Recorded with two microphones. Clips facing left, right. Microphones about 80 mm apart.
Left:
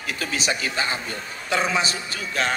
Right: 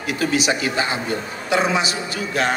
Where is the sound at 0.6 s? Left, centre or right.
Right.